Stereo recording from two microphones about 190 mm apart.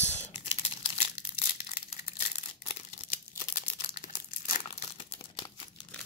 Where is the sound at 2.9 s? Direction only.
40° left (ahead or behind).